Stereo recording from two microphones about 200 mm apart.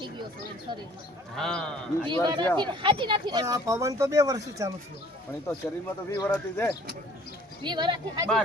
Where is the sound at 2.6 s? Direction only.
25° right (ahead or behind).